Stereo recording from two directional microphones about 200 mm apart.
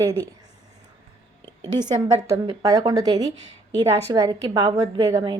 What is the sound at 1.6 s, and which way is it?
A woman's voice, 20° right (ahead or behind).